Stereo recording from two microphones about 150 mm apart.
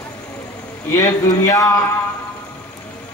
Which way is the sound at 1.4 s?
20° left (ahead or behind).